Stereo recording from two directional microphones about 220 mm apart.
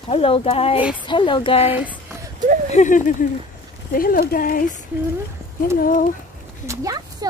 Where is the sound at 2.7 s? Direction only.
35° left (ahead or behind).